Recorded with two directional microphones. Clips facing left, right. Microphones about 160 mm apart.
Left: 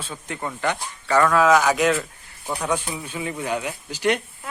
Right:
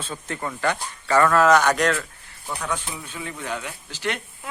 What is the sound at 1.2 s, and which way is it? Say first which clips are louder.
Speech: even; centre (ahead or behind).